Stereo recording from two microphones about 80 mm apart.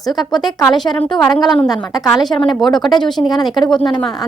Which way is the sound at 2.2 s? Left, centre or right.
Left.